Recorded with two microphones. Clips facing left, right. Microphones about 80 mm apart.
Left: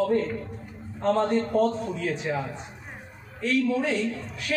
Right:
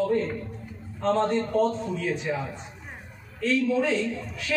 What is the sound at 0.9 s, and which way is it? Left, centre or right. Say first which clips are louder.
Speech: left 1 dB; centre.